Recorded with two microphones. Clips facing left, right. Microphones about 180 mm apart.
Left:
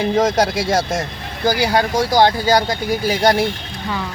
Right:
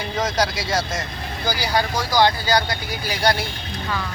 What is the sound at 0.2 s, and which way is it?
Speech, 50° left (ahead or behind).